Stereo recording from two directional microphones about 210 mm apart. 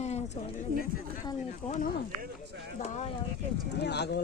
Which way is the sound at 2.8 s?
30° left (ahead or behind).